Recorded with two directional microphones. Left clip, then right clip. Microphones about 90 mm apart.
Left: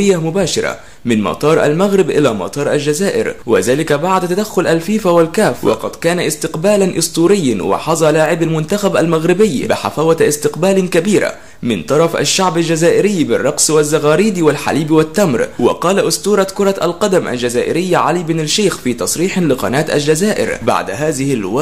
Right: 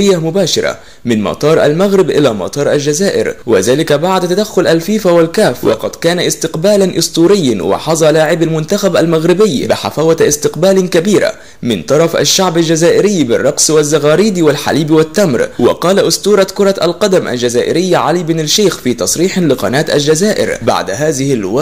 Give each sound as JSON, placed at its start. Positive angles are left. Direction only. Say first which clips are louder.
{"t": 0.0, "sound": "speech", "louder": "right 3 dB", "side_deg": -20}